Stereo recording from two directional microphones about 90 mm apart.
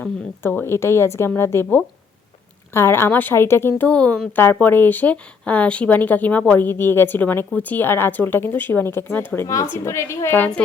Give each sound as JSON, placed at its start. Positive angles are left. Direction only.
{"t": 0.0, "sound": "speech", "side_deg": 25}